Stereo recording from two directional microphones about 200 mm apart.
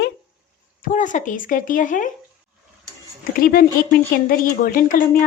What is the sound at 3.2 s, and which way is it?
Speech, 45° left (ahead or behind).